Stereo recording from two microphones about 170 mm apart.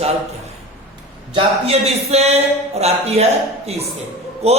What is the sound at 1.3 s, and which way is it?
Speech, 40° right (ahead or behind).